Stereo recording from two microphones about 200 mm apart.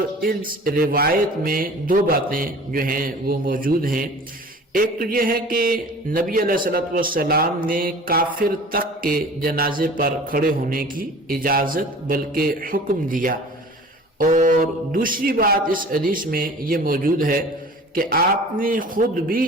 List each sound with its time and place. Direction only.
0.3 s speech: 45° right (ahead or behind)